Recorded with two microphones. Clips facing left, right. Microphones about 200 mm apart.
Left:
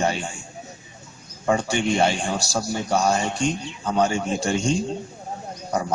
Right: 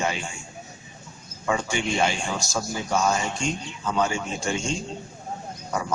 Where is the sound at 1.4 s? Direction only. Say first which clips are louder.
Left 4 dB; 35° left (ahead or behind).